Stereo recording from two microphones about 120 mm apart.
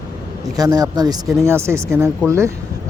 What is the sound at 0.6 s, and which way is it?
Speech, 30° right (ahead or behind).